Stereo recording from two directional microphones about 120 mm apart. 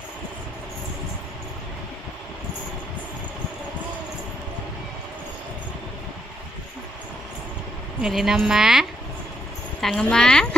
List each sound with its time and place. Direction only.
8.0 s speech: 5° right (ahead or behind)